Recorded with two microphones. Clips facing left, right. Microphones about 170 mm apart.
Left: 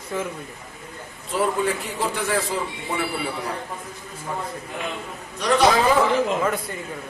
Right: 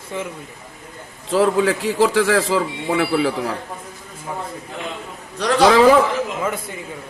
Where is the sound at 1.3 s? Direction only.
90° right.